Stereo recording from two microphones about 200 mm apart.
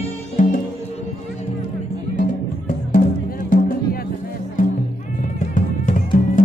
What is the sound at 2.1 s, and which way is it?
Music, 40° left (ahead or behind).